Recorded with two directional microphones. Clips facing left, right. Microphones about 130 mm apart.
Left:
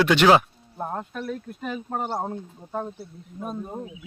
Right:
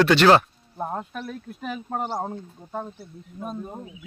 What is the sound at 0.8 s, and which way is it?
Speech, 5° right (ahead or behind).